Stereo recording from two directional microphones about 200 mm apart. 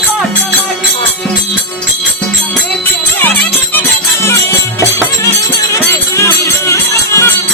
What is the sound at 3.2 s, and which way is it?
Music, 10° left (ahead or behind).